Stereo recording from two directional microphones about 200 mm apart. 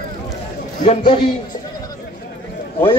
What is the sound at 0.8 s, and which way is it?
Speech, 35° left (ahead or behind).